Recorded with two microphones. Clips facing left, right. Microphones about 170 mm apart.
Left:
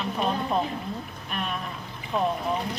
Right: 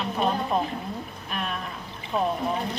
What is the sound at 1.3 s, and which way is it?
Boat, centre (ahead or behind).